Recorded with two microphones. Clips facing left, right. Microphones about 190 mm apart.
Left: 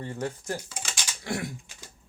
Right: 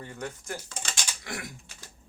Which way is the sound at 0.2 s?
30° left (ahead or behind).